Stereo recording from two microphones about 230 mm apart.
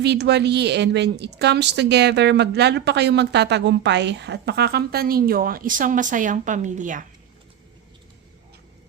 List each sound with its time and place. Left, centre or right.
0.0 s a woman's voice: right